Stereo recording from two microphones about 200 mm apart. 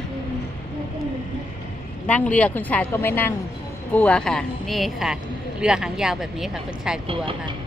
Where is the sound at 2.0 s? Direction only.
5° left (ahead or behind).